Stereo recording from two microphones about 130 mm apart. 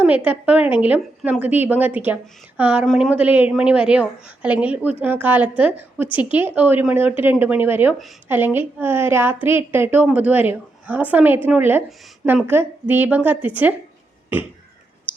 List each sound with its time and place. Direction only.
0.3 s a woman's voice: 10° right (ahead or behind)